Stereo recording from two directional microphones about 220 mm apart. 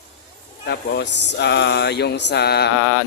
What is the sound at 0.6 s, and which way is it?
Speech, 50° left (ahead or behind).